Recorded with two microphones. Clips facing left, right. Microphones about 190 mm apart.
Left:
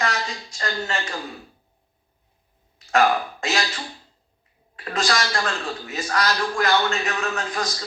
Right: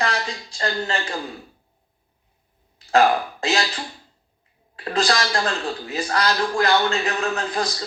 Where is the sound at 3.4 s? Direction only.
35° right (ahead or behind).